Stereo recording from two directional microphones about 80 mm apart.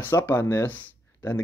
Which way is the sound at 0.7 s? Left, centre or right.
Left.